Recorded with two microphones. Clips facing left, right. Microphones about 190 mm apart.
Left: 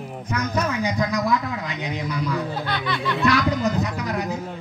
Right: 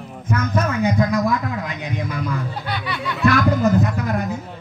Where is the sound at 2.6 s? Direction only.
10° right (ahead or behind).